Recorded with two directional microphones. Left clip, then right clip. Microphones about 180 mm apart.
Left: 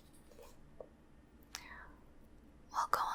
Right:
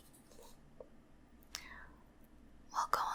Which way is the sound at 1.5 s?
5° left (ahead or behind).